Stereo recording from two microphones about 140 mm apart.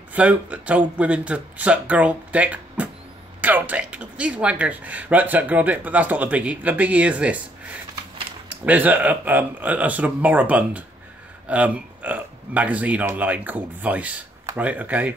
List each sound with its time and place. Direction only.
0.1 s speech: 10° right (ahead or behind)
8.5 s speech: 10° right (ahead or behind)